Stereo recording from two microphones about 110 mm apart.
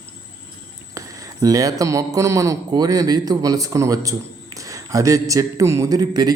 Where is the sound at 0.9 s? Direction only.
35° right (ahead or behind).